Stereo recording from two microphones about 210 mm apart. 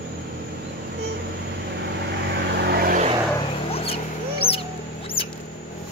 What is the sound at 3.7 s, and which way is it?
Mouse, 30° left (ahead or behind).